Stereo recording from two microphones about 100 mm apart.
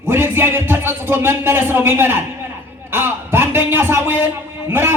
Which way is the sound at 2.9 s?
20° right (ahead or behind).